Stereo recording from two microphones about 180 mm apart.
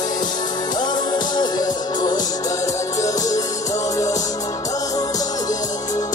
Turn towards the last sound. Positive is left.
turn(degrees=20)  # may be behind; listen again after turning